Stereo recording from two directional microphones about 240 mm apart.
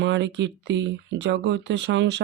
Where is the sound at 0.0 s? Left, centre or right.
Right.